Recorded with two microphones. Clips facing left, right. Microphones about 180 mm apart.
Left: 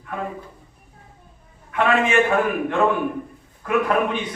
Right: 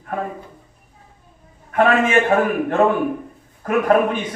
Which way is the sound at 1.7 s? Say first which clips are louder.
Right 3 dB; 45° right (ahead or behind).